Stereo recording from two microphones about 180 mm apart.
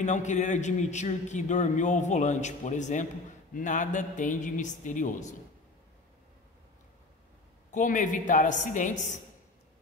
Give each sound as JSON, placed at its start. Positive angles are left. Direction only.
{"t": 0.0, "sound": "a man's voice", "side_deg": 40}
{"t": 7.7, "sound": "a man's voice", "side_deg": 45}